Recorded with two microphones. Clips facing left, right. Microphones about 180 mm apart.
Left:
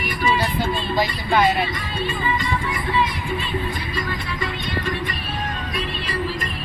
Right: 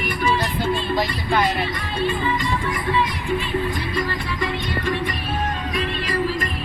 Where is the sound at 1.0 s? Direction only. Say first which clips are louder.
Left 2 dB; centre (ahead or behind).